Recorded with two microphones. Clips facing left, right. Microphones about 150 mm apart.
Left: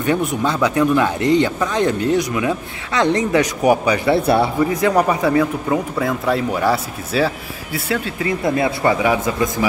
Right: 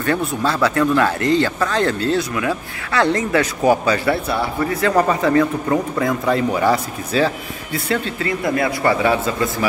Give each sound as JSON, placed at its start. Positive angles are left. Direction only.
{"t": 0.0, "sound": "speech", "side_deg": 15}
{"t": 8.3, "sound": "speech", "side_deg": 20}